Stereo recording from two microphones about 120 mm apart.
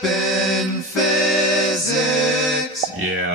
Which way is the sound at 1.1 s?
Centre (ahead or behind).